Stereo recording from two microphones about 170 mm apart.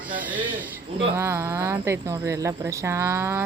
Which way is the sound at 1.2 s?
15° right (ahead or behind).